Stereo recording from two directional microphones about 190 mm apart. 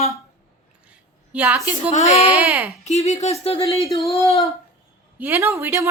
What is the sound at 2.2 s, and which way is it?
Speech, 5° right (ahead or behind).